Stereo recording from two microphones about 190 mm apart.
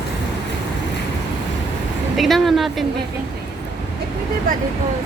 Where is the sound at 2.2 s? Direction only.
Centre (ahead or behind).